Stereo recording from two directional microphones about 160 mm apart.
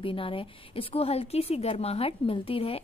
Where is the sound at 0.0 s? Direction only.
35° left (ahead or behind).